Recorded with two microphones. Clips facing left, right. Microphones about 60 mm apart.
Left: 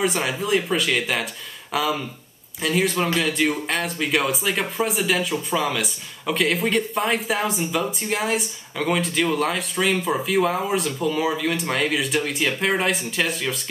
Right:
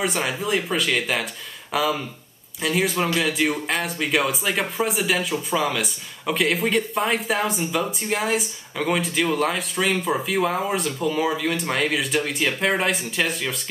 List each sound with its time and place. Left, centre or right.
0.0 s speech: centre